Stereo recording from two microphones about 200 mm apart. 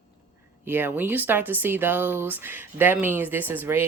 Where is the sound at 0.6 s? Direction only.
10° right (ahead or behind).